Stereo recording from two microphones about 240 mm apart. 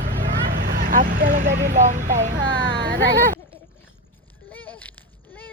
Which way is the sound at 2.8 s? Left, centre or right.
Right.